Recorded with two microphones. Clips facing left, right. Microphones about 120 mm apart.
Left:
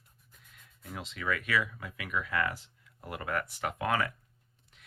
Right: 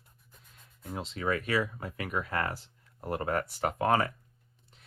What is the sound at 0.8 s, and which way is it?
Speech, 30° right (ahead or behind).